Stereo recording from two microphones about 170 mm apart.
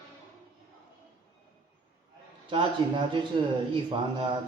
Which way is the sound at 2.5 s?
30° right (ahead or behind).